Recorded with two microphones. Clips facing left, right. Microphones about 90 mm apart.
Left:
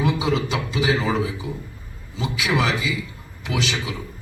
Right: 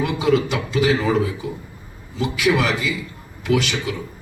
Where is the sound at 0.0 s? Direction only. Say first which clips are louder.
Right 3 dB; 55° right (ahead or behind).